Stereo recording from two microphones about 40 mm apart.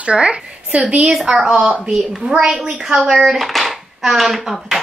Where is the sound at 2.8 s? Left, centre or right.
Right.